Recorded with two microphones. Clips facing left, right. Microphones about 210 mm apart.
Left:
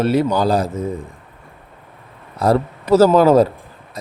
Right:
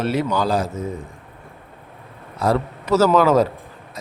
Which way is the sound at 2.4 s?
35° left (ahead or behind).